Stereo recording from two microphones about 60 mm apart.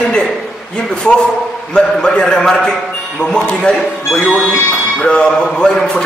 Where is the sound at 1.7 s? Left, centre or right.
Centre.